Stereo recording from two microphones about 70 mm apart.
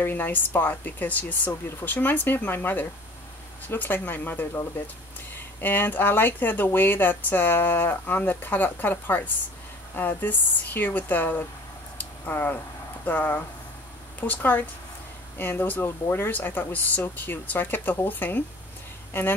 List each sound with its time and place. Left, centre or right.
0.0 s speech: left
12.0 s a sound: left
13.0 s speech: left